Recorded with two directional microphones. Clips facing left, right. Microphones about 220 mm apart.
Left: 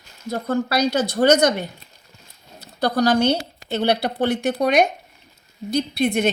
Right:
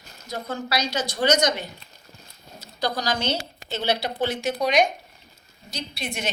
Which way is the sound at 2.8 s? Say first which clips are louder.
Left 9 dB; 60° left (ahead or behind).